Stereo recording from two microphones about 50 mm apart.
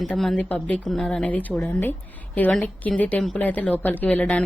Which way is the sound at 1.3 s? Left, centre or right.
Left.